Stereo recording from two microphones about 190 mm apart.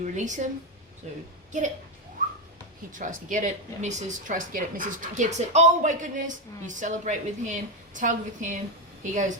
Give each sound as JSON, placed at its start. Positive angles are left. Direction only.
{"t": 0.0, "sound": "speech", "side_deg": -40}
{"t": 3.0, "sound": "speech", "side_deg": -40}